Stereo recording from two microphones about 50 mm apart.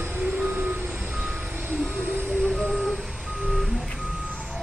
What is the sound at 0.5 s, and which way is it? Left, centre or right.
Reversing beeps, right.